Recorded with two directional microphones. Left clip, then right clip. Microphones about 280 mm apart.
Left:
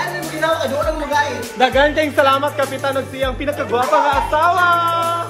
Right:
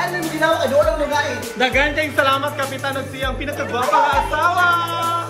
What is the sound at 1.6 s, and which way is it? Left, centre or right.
Speech, centre.